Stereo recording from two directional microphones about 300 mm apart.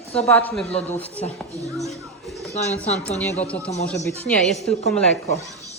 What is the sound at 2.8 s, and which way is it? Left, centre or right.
Speech, centre.